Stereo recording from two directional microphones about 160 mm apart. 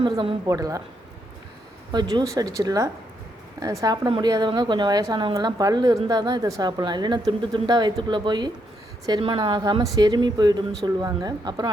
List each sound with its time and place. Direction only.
0.0 s a woman's voice: 30° right (ahead or behind)
1.9 s a woman's voice: 25° right (ahead or behind)